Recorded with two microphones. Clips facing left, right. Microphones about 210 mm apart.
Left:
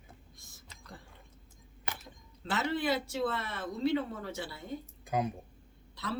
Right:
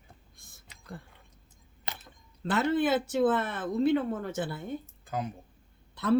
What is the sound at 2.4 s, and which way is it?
Speech, 55° right (ahead or behind).